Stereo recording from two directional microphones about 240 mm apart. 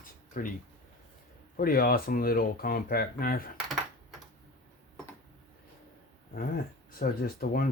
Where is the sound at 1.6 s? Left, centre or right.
Left.